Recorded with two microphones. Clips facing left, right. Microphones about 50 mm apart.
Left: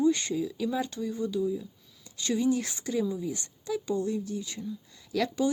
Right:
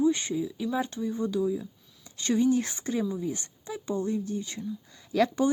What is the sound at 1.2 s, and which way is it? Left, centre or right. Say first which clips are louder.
Speech: right 1 dB; right.